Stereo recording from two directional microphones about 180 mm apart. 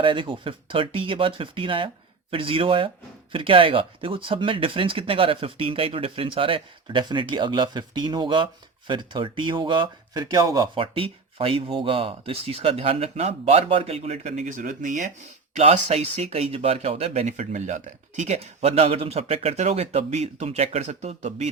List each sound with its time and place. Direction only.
0.0 s speech: 30° right (ahead or behind)